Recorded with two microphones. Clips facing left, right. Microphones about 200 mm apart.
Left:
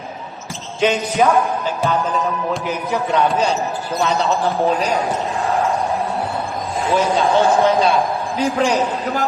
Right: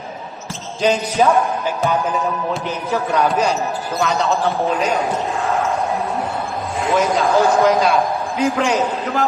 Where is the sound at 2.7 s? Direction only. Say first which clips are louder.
Left 1 dB; 15° left (ahead or behind).